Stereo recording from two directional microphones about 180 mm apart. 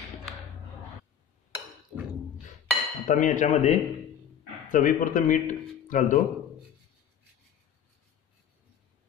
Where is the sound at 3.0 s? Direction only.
45° left (ahead or behind).